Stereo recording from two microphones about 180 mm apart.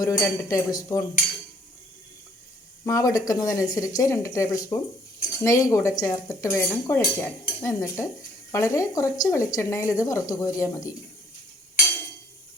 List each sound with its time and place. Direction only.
0.0 s speech: 20° left (ahead or behind)
2.8 s speech: 20° left (ahead or behind)